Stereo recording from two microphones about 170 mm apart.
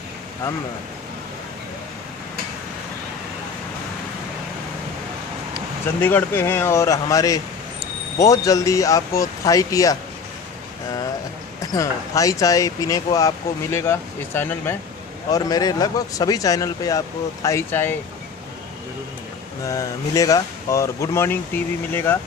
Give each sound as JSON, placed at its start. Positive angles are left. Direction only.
{"t": 5.5, "sound": "speech", "side_deg": 10}
{"t": 11.6, "sound": "speech", "side_deg": 20}
{"t": 19.6, "sound": "speech", "side_deg": 20}